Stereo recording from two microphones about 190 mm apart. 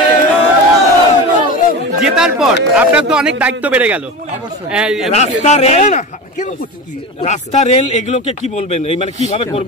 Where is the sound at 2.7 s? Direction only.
5° right (ahead or behind).